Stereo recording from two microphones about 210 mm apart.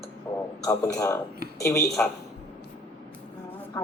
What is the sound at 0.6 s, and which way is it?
Speech, 15° left (ahead or behind).